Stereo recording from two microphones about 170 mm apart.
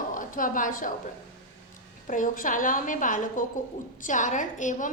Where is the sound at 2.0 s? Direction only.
50° left (ahead or behind).